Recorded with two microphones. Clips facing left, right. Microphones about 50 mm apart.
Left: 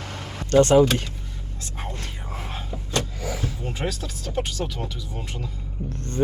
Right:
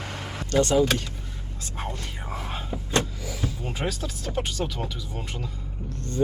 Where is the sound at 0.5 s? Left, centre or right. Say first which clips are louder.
Left 5 dB; left.